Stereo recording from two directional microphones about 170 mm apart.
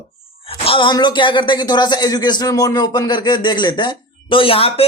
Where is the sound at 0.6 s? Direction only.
30° left (ahead or behind).